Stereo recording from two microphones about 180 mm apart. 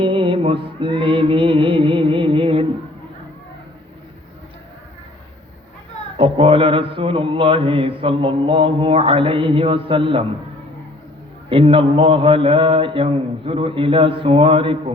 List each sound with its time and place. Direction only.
0.0 s music: 30° right (ahead or behind)
6.1 s mantra: 30° right (ahead or behind)
11.4 s mantra: 30° right (ahead or behind)